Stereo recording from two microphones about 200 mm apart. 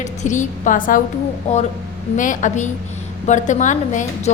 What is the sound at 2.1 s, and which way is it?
A woman's voice, 40° left (ahead or behind).